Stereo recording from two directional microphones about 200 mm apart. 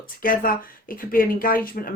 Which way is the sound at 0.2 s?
45° left (ahead or behind).